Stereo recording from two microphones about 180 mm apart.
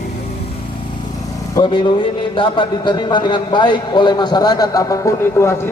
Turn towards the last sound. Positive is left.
turn(degrees=15)  # may be behind; listen again after turning